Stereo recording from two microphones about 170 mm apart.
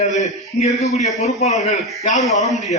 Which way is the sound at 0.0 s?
45° left (ahead or behind).